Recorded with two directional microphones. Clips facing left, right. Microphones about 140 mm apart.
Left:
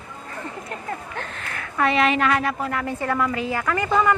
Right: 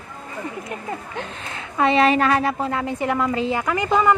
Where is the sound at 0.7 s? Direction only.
20° right (ahead or behind).